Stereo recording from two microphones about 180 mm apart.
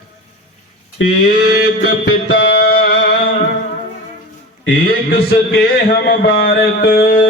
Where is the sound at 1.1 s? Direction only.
65° left (ahead or behind).